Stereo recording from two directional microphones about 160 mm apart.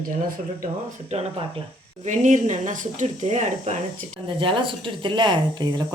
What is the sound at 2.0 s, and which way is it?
Speech, 50° right (ahead or behind).